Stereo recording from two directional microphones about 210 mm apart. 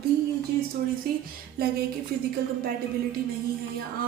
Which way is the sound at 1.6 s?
45° right (ahead or behind).